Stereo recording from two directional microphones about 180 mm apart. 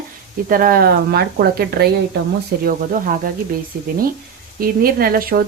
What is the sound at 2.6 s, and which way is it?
Speech, 50° right (ahead or behind).